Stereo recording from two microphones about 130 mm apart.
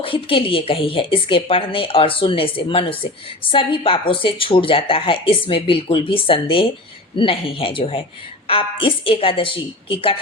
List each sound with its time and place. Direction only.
0.0 s a woman's voice: 45° left (ahead or behind)